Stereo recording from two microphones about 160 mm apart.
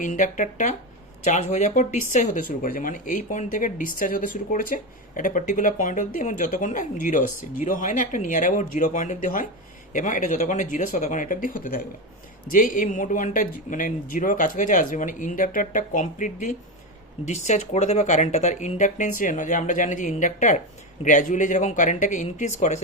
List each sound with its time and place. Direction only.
0.0 s speech: 50° left (ahead or behind)